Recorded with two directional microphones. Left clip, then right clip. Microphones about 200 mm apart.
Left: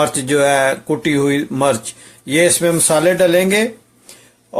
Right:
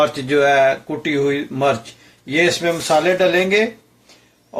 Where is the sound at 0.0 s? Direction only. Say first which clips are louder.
Left 1 dB; 60° left (ahead or behind).